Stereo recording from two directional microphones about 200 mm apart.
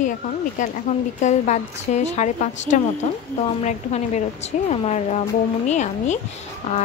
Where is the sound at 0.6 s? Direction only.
40° left (ahead or behind).